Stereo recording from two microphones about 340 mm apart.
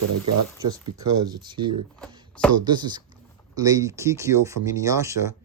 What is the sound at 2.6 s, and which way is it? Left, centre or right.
Speech, centre.